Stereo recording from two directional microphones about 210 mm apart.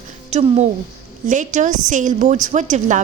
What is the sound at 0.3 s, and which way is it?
A woman's voice, 30° right (ahead or behind).